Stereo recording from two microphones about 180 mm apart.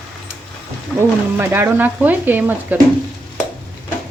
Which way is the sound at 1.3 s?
10° right (ahead or behind).